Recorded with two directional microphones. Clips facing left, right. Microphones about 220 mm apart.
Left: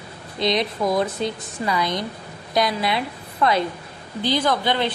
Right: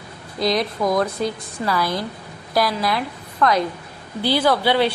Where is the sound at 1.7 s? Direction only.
15° left (ahead or behind).